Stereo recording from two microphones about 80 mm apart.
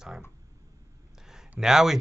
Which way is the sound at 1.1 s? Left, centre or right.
Centre.